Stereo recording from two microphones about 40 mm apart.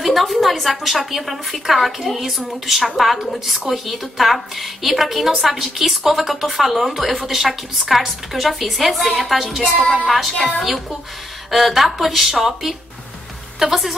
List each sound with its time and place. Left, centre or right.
0.0 s a woman's voice: centre